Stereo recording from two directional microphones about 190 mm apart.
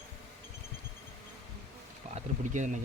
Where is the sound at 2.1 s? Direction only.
40° right (ahead or behind).